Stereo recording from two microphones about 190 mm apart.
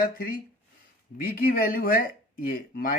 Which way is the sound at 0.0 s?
50° left (ahead or behind).